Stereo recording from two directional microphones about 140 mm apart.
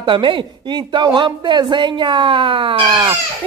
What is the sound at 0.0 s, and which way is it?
Speech, 35° right (ahead or behind).